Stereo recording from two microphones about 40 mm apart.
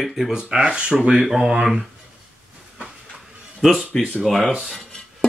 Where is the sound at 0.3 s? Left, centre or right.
Centre.